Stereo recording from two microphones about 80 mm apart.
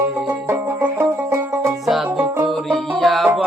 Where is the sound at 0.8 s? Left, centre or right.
Right.